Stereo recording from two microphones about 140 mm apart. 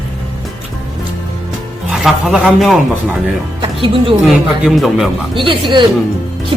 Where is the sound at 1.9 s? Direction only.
Centre (ahead or behind).